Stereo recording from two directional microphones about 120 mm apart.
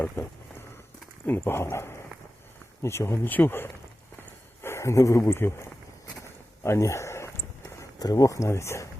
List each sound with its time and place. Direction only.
1.3 s speech: 20° left (ahead or behind)
6.1 s a sound: 25° left (ahead or behind)
7.8 s speech: 30° left (ahead or behind)